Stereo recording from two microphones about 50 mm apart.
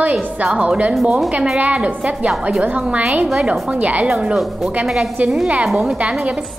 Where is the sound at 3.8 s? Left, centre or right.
Right.